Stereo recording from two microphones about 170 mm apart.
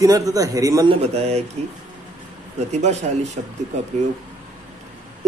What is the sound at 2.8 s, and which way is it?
Speech, 40° right (ahead or behind).